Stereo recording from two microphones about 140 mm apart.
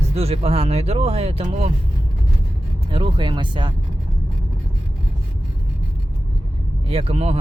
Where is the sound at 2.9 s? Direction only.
40° right (ahead or behind).